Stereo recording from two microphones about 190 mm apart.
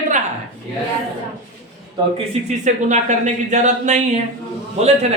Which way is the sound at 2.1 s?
40° right (ahead or behind).